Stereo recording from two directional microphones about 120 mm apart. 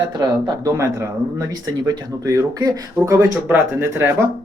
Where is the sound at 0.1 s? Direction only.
35° right (ahead or behind).